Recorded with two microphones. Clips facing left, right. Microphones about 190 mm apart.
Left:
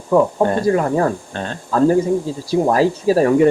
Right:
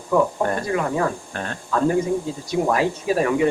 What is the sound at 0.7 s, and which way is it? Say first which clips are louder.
Speech: left 6 dB; 40° left (ahead or behind).